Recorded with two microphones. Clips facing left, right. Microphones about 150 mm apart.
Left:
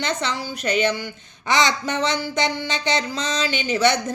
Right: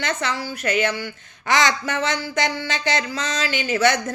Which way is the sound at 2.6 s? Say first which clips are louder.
Even; 20° left (ahead or behind).